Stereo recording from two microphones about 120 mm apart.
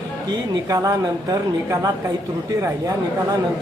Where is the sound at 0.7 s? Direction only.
25° right (ahead or behind).